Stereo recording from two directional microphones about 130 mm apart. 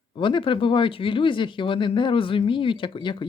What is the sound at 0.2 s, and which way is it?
Speech, 40° left (ahead or behind).